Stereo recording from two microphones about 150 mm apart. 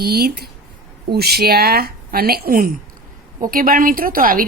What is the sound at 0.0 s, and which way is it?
A woman's voice, 90° right.